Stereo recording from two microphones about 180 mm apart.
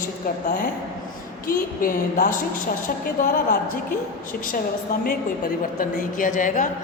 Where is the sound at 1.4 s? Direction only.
50° left (ahead or behind).